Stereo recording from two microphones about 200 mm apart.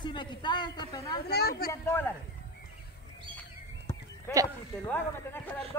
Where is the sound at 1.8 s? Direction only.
10° left (ahead or behind).